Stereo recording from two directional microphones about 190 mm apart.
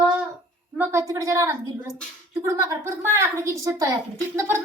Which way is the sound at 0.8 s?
15° right (ahead or behind).